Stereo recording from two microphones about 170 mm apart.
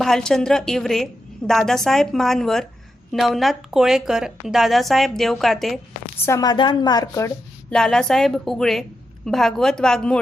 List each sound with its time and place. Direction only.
0.0 s a woman's voice: 5° left (ahead or behind)
6.2 s a woman's voice: 20° left (ahead or behind)
7.7 s a woman's voice: 5° left (ahead or behind)